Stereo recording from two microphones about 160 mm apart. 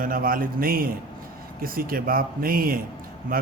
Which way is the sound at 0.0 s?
60° right (ahead or behind).